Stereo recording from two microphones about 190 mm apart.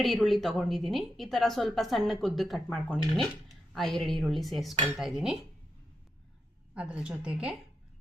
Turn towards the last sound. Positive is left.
turn(degrees=-5)  # may be behind; listen again after turning